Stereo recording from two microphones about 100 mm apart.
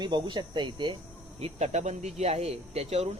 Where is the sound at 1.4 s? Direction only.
90° right.